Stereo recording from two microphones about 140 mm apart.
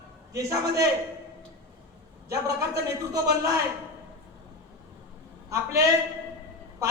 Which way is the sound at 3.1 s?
25° right (ahead or behind).